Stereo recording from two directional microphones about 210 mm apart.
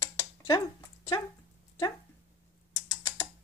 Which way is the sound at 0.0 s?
15° left (ahead or behind).